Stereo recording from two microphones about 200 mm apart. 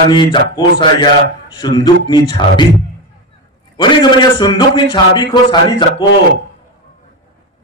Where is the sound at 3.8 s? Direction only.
25° left (ahead or behind).